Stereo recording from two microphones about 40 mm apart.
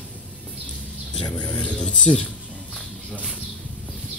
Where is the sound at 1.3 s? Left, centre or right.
Left.